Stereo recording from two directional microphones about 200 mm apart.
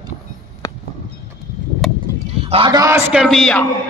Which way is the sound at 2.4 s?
25° right (ahead or behind).